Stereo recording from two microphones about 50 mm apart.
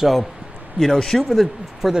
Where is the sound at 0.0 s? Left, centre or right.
Centre.